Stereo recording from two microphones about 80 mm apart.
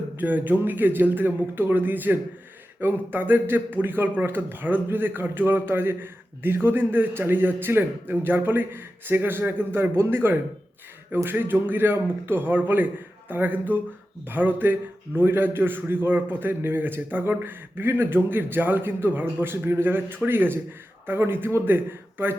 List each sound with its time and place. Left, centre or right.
0.2 s speech: right